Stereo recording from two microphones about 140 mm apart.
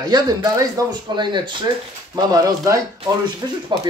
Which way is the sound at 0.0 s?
30° right (ahead or behind).